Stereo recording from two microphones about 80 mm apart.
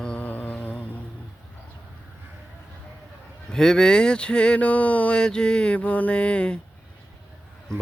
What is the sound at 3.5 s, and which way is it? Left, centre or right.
Mantra, centre.